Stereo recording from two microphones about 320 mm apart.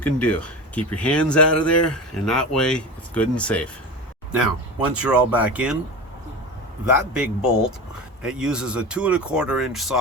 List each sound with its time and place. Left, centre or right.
0.0 s speech: centre
4.8 s speech: centre
6.8 s speech: centre